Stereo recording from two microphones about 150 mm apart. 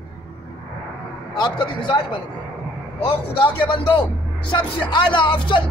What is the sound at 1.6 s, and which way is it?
Speech, 30° left (ahead or behind).